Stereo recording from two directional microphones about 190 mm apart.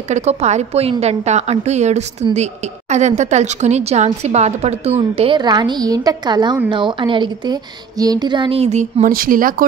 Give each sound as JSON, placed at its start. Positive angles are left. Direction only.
{"t": 0.1, "sound": "a woman's voice", "side_deg": -35}